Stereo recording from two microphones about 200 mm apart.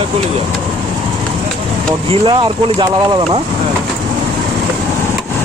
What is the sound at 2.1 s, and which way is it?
Speech, 25° right (ahead or behind).